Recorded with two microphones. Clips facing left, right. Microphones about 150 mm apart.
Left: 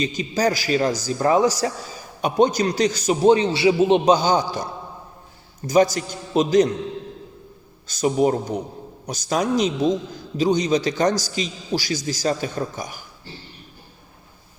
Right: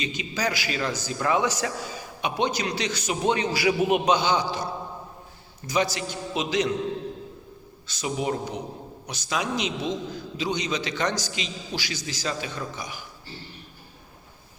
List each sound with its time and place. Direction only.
0.0 s a man's voice: 40° left (ahead or behind)
5.6 s a man's voice: 45° left (ahead or behind)
7.9 s a man's voice: 45° left (ahead or behind)